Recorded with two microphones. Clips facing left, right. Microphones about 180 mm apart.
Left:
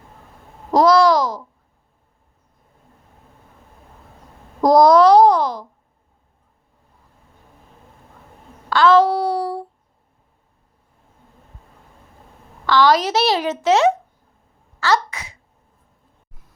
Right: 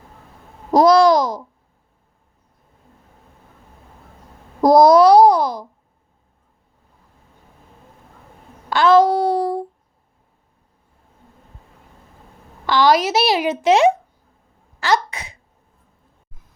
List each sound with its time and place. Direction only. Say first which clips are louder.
0.7 s a child's voice: right 2 dB; 15° right (ahead or behind)
4.6 s a child's voice: right 1 dB; 10° right (ahead or behind)
8.7 s a sound: right 1 dB; 20° right (ahead or behind)
12.6 s a child's voice: even; 15° right (ahead or behind)